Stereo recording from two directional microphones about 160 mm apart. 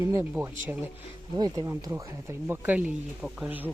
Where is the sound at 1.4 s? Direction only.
20° right (ahead or behind).